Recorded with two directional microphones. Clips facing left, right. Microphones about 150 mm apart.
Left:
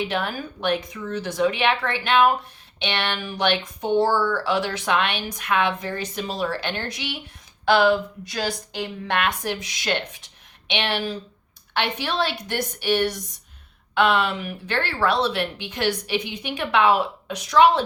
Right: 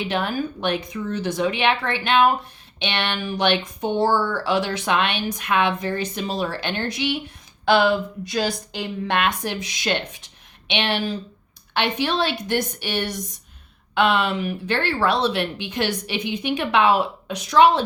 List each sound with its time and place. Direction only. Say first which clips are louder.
0.0 s speech: right 2 dB; 25° right (ahead or behind)